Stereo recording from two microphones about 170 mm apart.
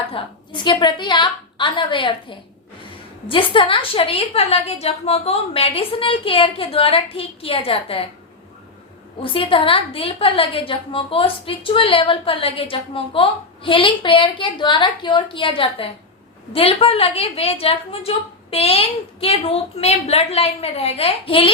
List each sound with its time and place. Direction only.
0.1 s a woman's voice: 30° left (ahead or behind)
3.2 s a woman's voice: 30° left (ahead or behind)
9.2 s a woman's voice: 30° left (ahead or behind)